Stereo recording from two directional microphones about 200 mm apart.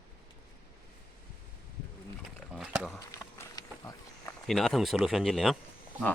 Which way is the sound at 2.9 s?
15° left (ahead or behind).